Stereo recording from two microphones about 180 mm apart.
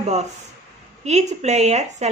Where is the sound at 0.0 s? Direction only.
35° right (ahead or behind).